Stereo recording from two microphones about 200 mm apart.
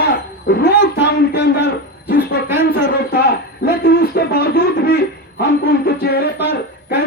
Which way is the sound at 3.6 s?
55° left (ahead or behind).